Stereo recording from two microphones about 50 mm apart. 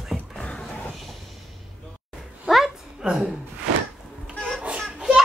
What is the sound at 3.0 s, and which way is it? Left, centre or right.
Speech, centre.